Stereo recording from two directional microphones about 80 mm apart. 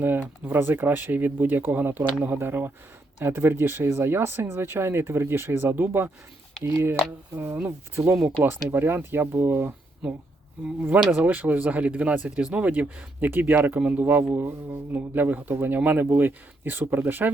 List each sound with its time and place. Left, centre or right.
0.0 s speech: right
11.1 s speech: right